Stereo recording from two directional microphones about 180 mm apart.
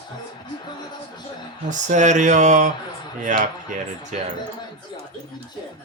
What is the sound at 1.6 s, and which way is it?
Speech, 45° right (ahead or behind).